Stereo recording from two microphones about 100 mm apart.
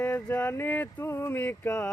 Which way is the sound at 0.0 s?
20° left (ahead or behind).